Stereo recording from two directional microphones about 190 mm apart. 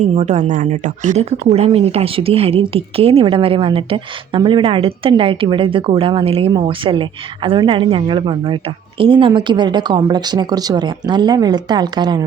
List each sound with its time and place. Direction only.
0.0 s a woman's voice: 35° right (ahead or behind)